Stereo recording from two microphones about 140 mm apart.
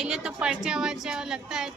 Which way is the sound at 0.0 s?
5° right (ahead or behind).